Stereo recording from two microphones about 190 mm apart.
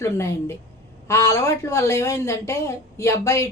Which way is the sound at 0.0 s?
15° left (ahead or behind).